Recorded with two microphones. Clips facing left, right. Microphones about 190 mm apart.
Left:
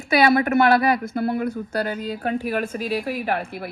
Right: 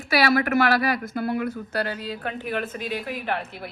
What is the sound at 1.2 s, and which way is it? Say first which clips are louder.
Speech: left 3 dB; 50° left (ahead or behind).